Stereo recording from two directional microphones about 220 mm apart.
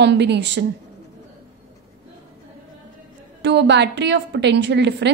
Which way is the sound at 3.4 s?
50° right (ahead or behind).